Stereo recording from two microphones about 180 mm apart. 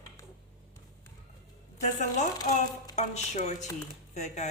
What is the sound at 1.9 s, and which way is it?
Speech, 40° left (ahead or behind).